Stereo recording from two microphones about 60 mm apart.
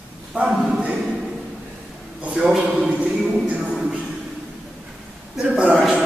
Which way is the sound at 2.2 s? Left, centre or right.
Centre.